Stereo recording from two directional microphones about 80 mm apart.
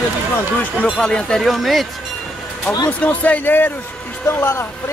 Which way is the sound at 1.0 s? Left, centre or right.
Centre.